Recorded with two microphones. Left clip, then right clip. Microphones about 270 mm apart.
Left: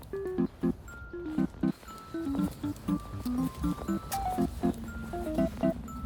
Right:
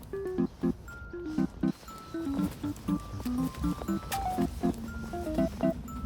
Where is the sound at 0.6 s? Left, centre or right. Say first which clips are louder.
Even; centre.